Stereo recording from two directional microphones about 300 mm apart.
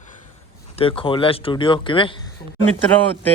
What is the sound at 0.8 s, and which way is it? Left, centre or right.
Speech, centre.